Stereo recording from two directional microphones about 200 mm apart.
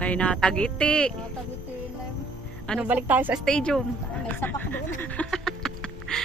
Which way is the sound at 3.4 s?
5° left (ahead or behind).